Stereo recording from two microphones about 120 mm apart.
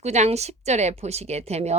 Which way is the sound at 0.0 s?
65° right (ahead or behind).